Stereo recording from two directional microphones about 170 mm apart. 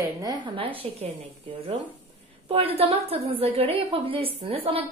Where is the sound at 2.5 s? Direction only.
35° right (ahead or behind).